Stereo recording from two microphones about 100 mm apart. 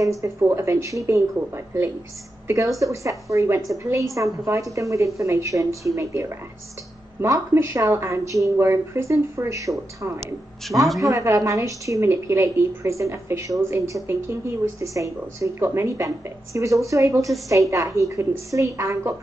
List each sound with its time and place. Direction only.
0.2 s a woman's voice: 30° right (ahead or behind)